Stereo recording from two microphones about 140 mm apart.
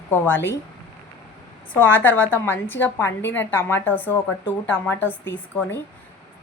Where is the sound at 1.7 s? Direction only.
15° left (ahead or behind).